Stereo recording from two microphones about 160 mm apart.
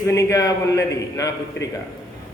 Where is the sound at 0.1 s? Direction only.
20° left (ahead or behind).